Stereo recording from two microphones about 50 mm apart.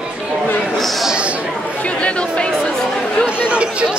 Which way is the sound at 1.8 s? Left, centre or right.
Left.